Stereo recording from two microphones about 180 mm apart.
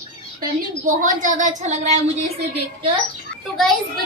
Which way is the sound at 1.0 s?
45° right (ahead or behind).